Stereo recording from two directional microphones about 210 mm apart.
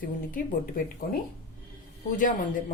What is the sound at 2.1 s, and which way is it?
Speech, 40° left (ahead or behind).